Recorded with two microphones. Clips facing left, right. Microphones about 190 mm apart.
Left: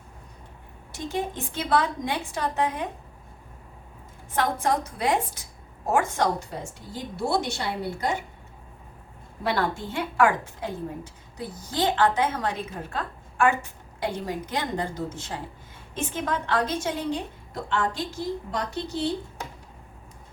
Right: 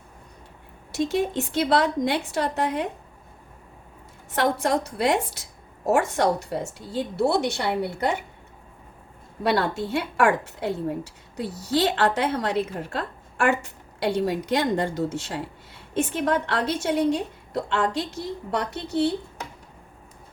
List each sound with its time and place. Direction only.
0.9 s a woman's voice: 75° right (ahead or behind)
4.3 s a woman's voice: 70° right (ahead or behind)
9.5 s a woman's voice: 70° right (ahead or behind)